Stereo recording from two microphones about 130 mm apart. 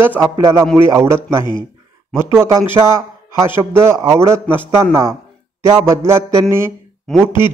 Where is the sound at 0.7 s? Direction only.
20° right (ahead or behind).